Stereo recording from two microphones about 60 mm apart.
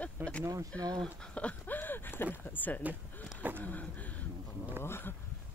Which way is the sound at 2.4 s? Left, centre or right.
Left.